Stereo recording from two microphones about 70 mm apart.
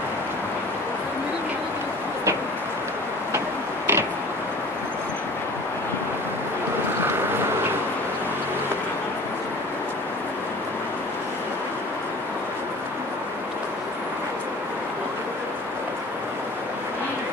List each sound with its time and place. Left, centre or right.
3.3 s tick-tock: right